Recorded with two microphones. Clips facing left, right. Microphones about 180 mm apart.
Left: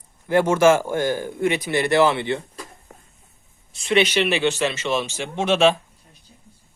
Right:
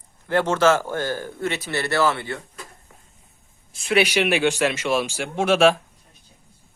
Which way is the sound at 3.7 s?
5° right (ahead or behind).